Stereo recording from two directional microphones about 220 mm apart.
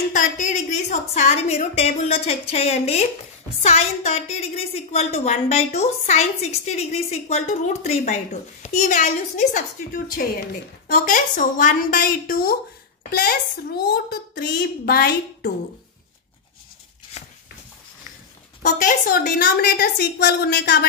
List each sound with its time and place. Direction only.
0.1 s a woman's voice: 35° left (ahead or behind)
18.6 s a woman's voice: 35° left (ahead or behind)